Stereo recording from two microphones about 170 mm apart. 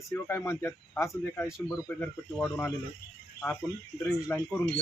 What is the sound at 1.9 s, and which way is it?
Speech, 5° left (ahead or behind).